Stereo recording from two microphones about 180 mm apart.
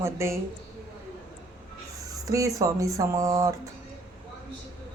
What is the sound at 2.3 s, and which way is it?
Speech, 20° right (ahead or behind).